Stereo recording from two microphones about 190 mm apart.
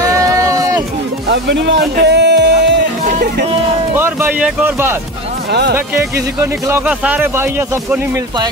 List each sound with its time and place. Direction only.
0.0 s run: 15° right (ahead or behind)
1.3 s speech: 70° right (ahead or behind)
2.0 s music: 65° right (ahead or behind)
3.9 s speech: 10° right (ahead or behind)